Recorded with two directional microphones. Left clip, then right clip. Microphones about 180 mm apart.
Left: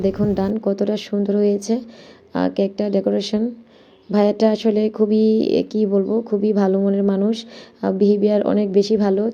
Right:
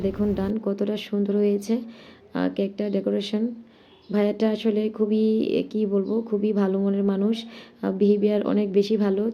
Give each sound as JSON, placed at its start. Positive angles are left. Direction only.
{"t": 0.0, "sound": "speech", "side_deg": 30}